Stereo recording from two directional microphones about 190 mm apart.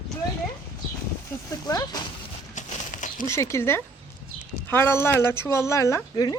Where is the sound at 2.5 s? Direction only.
40° left (ahead or behind).